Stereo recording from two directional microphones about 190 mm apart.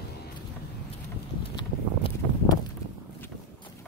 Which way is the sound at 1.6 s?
25° left (ahead or behind).